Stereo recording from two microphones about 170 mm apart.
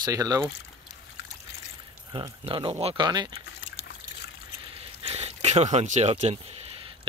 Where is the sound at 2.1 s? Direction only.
25° right (ahead or behind).